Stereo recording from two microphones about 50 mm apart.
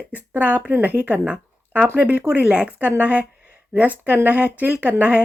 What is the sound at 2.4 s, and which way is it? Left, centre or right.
Speech, centre.